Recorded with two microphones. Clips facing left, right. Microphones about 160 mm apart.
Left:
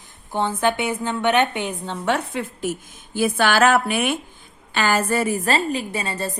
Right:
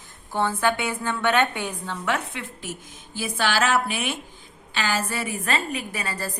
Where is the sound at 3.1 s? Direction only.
55° left (ahead or behind); by 6.4 s 25° left (ahead or behind).